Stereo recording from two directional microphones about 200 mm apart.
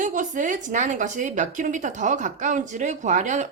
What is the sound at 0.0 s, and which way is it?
A woman's voice, 40° right (ahead or behind).